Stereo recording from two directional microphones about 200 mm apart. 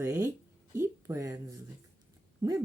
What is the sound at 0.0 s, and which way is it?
Speech, 15° right (ahead or behind).